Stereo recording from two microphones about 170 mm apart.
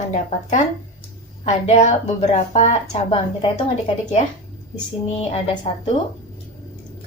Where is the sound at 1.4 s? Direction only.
40° left (ahead or behind).